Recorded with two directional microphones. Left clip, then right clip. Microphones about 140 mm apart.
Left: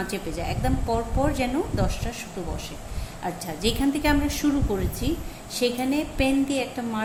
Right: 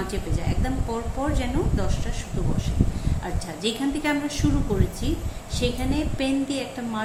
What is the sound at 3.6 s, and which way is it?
Speech, 50° left (ahead or behind).